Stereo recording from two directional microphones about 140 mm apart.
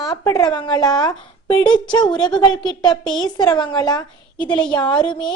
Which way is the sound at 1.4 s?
35° left (ahead or behind).